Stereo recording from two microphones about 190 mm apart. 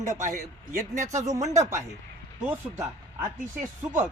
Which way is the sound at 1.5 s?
15° right (ahead or behind).